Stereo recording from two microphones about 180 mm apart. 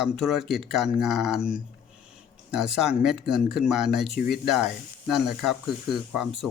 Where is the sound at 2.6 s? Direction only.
Centre (ahead or behind).